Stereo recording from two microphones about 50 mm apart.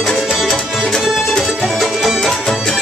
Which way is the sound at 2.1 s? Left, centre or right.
Centre.